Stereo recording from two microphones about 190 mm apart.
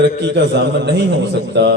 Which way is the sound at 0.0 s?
65° right (ahead or behind).